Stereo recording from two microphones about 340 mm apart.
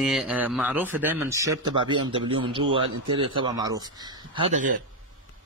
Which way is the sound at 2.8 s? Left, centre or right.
Right.